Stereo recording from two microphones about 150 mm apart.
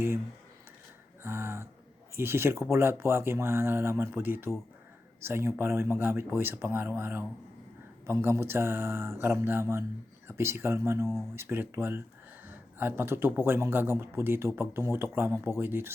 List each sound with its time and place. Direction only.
1.2 s speech: 15° right (ahead or behind)